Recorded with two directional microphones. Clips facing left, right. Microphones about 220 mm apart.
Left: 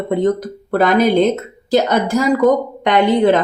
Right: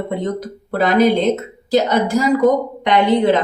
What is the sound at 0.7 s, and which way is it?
Speech, 50° left (ahead or behind).